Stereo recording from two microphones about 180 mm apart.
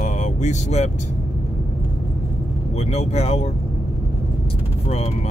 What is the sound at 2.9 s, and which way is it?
Speech, 35° left (ahead or behind).